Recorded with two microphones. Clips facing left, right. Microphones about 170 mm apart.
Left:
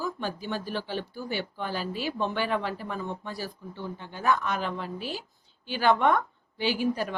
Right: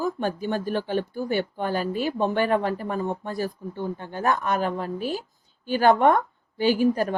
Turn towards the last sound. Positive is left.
turn(degrees=-45)  # may be behind; listen again after turning